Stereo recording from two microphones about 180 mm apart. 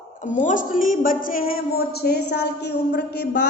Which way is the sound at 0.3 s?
45° left (ahead or behind).